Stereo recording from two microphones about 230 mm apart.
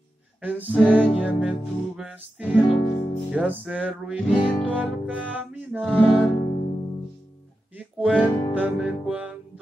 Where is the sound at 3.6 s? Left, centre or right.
Centre.